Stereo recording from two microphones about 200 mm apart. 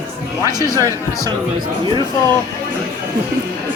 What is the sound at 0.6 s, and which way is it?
Speech, 15° right (ahead or behind).